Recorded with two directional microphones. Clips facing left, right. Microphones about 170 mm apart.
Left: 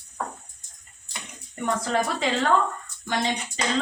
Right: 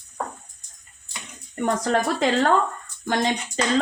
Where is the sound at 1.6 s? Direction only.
45° right (ahead or behind).